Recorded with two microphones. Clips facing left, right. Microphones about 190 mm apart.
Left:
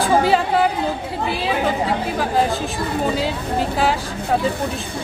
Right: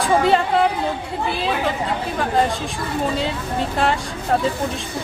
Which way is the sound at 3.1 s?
5° left (ahead or behind).